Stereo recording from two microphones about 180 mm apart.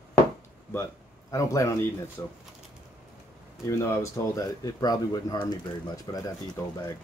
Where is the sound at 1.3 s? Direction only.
15° left (ahead or behind).